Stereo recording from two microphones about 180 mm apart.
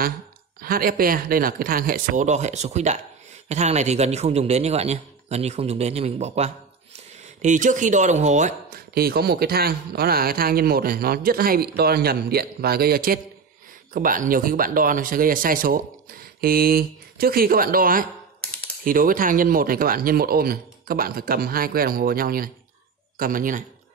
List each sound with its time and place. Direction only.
0.6 s a man's voice: 55° right (ahead or behind)
8.9 s a man's voice: 60° right (ahead or behind)